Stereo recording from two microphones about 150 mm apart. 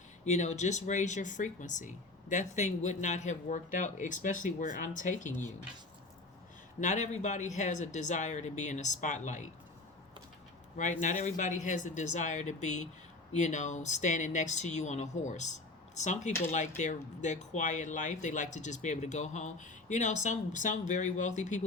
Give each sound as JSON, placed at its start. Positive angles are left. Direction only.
{"t": 0.3, "sound": "speech", "side_deg": 50}
{"t": 6.7, "sound": "speech", "side_deg": 55}
{"t": 10.8, "sound": "speech", "side_deg": 55}